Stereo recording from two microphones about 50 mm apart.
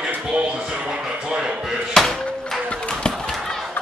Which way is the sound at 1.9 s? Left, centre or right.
Centre.